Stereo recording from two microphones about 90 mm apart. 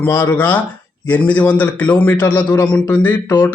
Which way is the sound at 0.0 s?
25° left (ahead or behind).